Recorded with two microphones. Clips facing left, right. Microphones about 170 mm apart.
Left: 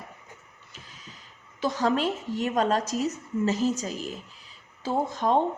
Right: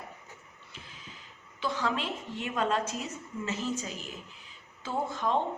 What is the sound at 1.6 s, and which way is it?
A woman's voice, 40° left (ahead or behind).